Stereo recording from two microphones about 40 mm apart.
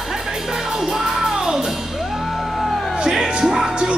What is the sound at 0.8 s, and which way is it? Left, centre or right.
Music, centre.